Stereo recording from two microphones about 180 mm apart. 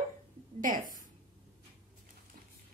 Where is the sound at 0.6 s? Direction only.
45° right (ahead or behind).